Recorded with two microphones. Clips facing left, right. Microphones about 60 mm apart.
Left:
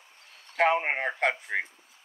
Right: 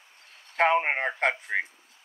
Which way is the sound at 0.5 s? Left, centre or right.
Right.